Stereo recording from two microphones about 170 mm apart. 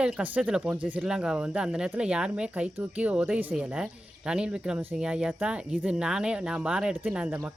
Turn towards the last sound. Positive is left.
turn(degrees=-5)  # may be behind; listen again after turning